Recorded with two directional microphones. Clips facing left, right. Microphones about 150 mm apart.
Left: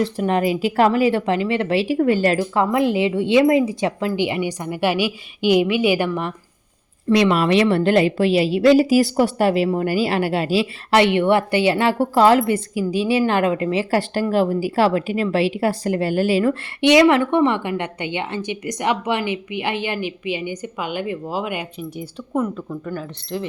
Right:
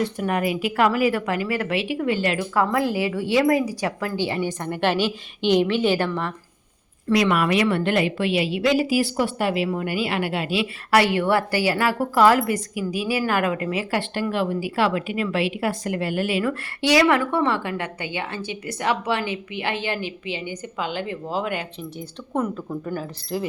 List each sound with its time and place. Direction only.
0.0 s a woman's voice: 25° left (ahead or behind)
2.7 s a woman's voice: 20° left (ahead or behind)
7.1 s a woman's voice: 25° left (ahead or behind)
11.0 s a woman's voice: 20° left (ahead or behind); by 23.5 s 5° right (ahead or behind)